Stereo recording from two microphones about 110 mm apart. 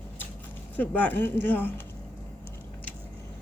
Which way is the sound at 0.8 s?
15° left (ahead or behind).